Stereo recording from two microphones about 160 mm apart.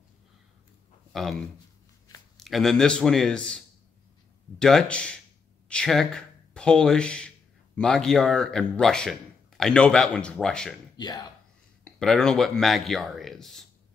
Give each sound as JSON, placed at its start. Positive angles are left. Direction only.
{"t": 2.3, "sound": "speech", "side_deg": 0}
{"t": 11.0, "sound": "speech", "side_deg": 25}
{"t": 11.8, "sound": "speech", "side_deg": 5}